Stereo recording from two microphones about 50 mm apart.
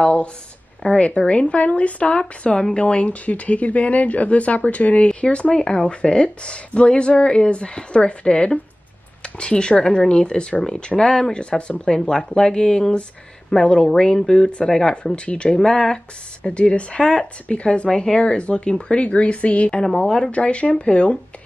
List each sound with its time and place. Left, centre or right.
0.0 s a woman's voice: left